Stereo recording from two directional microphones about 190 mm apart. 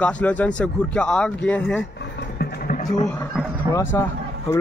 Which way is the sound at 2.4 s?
45° left (ahead or behind).